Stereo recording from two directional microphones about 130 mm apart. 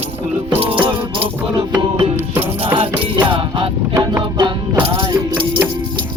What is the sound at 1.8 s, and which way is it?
Music, 35° right (ahead or behind).